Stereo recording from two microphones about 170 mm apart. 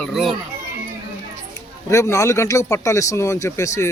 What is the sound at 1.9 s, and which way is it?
Speech, 20° left (ahead or behind).